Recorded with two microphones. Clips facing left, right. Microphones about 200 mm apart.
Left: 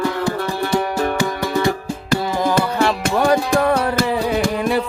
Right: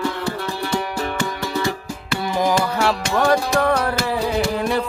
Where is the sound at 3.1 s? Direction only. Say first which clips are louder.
Left 2 dB; 10° left (ahead or behind).